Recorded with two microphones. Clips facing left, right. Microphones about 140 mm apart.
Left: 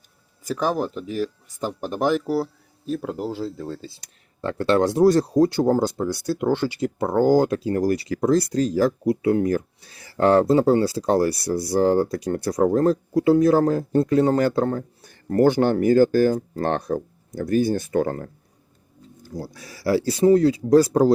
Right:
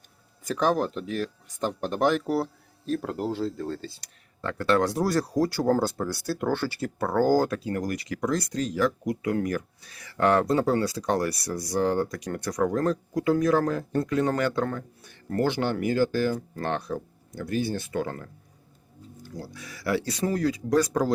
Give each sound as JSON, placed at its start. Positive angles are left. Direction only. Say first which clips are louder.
{"t": 0.4, "sound": "speech", "louder": "left 1 dB", "side_deg": 10}
{"t": 4.4, "sound": "speech", "louder": "left 4 dB", "side_deg": 30}